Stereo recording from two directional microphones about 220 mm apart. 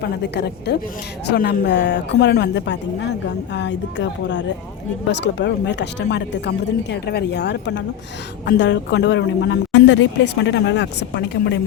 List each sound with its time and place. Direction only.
0.2 s a woman's voice: 50° left (ahead or behind)